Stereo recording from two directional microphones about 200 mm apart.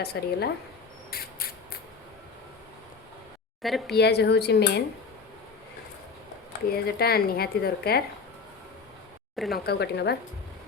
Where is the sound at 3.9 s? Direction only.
55° left (ahead or behind).